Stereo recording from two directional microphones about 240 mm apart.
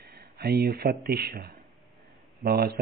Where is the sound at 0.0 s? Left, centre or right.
Right.